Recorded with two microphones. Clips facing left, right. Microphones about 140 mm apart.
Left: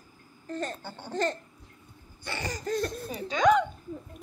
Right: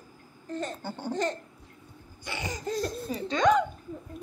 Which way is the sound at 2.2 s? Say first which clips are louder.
Even; 15° right (ahead or behind).